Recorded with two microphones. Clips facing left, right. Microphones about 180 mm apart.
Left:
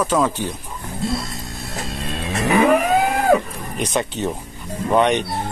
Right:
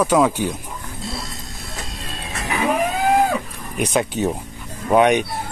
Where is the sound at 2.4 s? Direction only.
65° left (ahead or behind).